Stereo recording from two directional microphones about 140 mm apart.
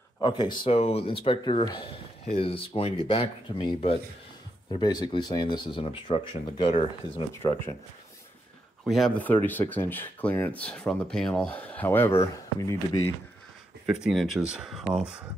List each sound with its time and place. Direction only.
0.2 s speech: 30° left (ahead or behind)
0.7 s speech: 45° left (ahead or behind)
4.6 s speech: 30° left (ahead or behind)
8.8 s speech: centre (ahead or behind)
9.1 s speech: 10° left (ahead or behind)
13.8 s speech: centre (ahead or behind)